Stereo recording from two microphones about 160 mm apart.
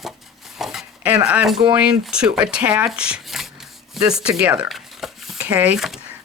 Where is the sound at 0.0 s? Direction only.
Centre (ahead or behind).